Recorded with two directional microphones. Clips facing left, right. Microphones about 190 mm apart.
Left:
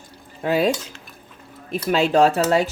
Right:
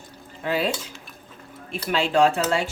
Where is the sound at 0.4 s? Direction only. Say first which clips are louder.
Left 5 dB; 45° left (ahead or behind).